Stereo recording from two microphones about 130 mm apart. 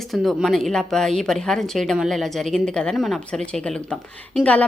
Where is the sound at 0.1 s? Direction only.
Centre (ahead or behind).